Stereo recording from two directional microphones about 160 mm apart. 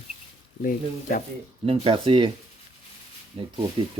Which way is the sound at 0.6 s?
60° left (ahead or behind).